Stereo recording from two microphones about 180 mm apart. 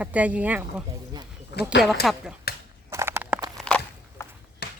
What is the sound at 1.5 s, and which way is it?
Speech, 70° left (ahead or behind).